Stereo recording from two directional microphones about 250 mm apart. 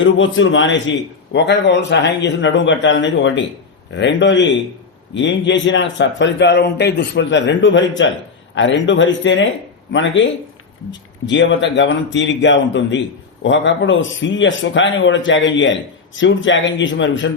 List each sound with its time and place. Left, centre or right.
0.0 s a man's voice: left